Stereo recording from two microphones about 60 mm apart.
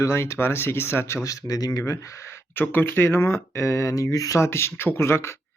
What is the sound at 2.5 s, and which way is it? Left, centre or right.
Speech, left.